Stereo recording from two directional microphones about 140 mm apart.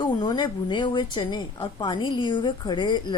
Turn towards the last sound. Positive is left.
turn(degrees=30)  # may be behind; listen again after turning